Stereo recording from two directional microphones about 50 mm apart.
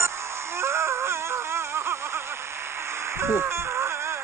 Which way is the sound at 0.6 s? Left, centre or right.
Right.